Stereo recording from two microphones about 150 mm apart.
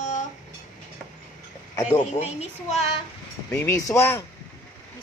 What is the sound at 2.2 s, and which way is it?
Speech, 45° left (ahead or behind).